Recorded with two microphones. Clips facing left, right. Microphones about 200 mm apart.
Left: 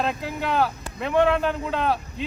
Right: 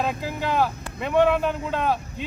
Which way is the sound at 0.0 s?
5° right (ahead or behind).